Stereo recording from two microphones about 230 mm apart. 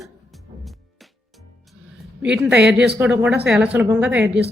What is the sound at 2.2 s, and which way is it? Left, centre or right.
A woman's voice, centre.